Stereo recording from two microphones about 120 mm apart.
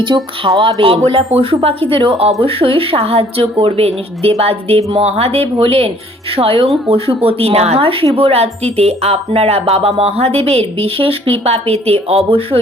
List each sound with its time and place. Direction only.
0.1 s speech: 45° right (ahead or behind)